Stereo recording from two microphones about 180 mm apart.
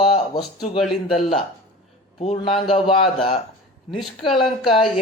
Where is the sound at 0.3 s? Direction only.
30° left (ahead or behind).